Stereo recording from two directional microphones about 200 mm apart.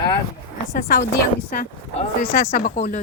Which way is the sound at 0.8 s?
50° left (ahead or behind).